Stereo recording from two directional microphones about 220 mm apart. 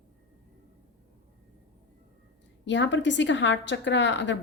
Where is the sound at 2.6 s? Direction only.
55° left (ahead or behind).